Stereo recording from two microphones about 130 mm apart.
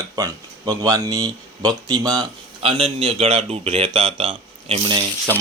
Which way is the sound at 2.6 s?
45° right (ahead or behind).